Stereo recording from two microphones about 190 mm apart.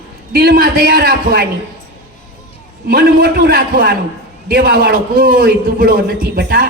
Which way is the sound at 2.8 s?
50° right (ahead or behind).